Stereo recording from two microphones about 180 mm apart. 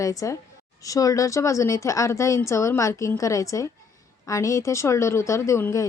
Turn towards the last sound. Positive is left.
turn(degrees=15)  # may be behind; listen again after turning